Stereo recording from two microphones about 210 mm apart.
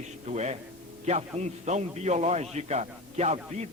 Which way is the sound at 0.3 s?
30° right (ahead or behind).